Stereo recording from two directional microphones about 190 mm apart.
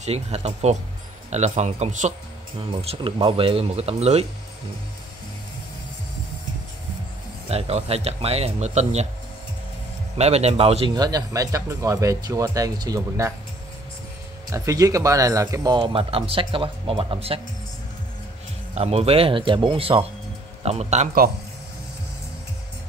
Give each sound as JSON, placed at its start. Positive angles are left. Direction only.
{"t": 0.0, "sound": "speech", "side_deg": -35}
{"t": 7.4, "sound": "speech", "side_deg": -35}
{"t": 10.1, "sound": "a man's voice", "side_deg": -35}
{"t": 14.5, "sound": "a man's voice", "side_deg": -15}
{"t": 18.8, "sound": "speech", "side_deg": -35}